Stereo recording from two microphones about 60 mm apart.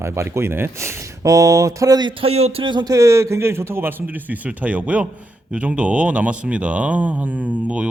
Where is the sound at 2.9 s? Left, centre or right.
Right.